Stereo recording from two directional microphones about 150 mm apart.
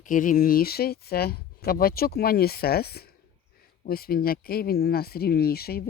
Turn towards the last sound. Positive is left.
turn(degrees=90)